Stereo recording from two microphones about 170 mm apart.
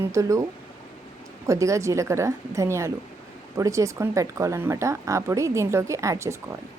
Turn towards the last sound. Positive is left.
turn(degrees=-15)  # may be behind; listen again after turning